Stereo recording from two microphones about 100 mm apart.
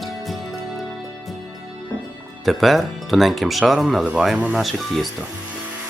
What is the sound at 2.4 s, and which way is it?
Speech, centre (ahead or behind).